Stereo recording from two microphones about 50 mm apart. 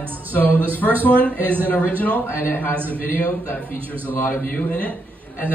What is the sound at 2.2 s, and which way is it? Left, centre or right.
Speech, left.